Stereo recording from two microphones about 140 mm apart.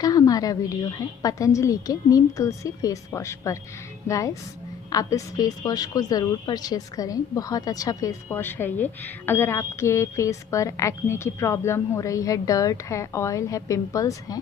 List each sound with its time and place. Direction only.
0.0 s a woman's voice: 25° left (ahead or behind)